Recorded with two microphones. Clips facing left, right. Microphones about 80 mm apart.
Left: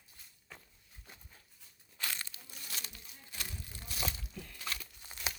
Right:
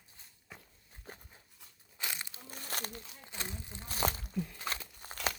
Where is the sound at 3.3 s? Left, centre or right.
Right.